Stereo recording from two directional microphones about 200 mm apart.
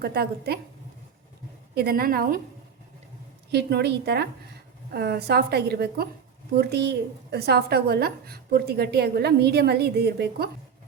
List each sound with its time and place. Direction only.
0.0 s a woman's voice: 50° right (ahead or behind)
1.7 s a woman's voice: 50° right (ahead or behind)
3.5 s a woman's voice: 55° right (ahead or behind)